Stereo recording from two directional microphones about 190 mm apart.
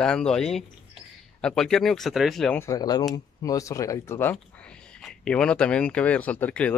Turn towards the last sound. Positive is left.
turn(degrees=5)  # may be behind; listen again after turning